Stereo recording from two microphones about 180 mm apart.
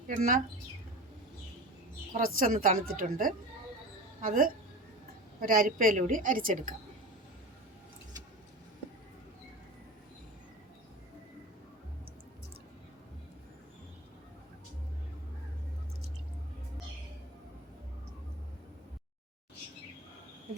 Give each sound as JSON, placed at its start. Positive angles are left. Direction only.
{"t": 0.1, "sound": "a woman's voice", "side_deg": -45}
{"t": 2.1, "sound": "a woman's voice", "side_deg": -50}